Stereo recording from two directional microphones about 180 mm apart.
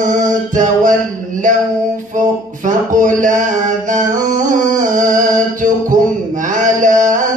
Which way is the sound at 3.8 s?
45° right (ahead or behind).